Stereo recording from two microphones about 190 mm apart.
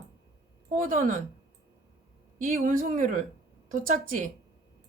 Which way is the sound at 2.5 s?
45° right (ahead or behind).